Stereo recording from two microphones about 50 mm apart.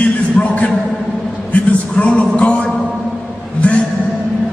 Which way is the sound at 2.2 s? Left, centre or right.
Left.